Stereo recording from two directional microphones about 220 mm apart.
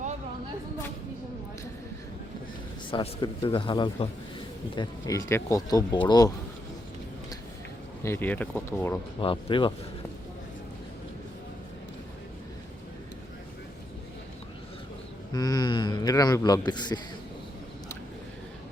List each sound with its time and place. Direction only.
2.9 s a man's voice: 20° left (ahead or behind)
8.0 s speech: 10° left (ahead or behind)
9.2 s a man's voice: 25° left (ahead or behind)
15.3 s a man's voice: 20° left (ahead or behind)